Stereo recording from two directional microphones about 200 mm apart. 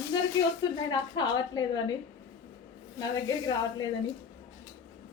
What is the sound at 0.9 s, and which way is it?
A woman's voice, 20° left (ahead or behind).